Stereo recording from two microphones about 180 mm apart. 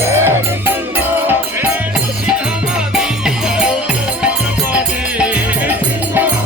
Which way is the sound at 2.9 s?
5° right (ahead or behind).